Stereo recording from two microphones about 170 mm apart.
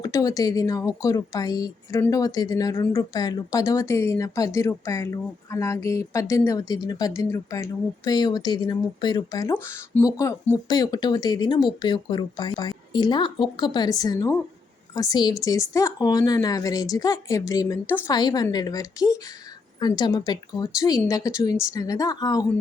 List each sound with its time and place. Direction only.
0.0 s speech: 20° left (ahead or behind)